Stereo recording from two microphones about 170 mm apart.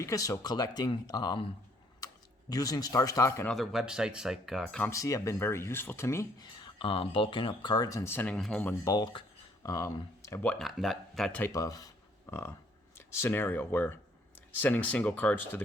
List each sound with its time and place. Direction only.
0.0 s speech: 20° left (ahead or behind)
2.5 s speech: 20° left (ahead or behind)
3.5 s speech: centre (ahead or behind)
4.9 s speech: 20° left (ahead or behind)
6.6 s speech: 30° left (ahead or behind); by 8.7 s 5° left (ahead or behind)
8.8 s speech: 20° left (ahead or behind)